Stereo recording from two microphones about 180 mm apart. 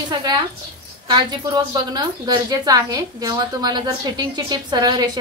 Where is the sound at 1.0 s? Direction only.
20° right (ahead or behind).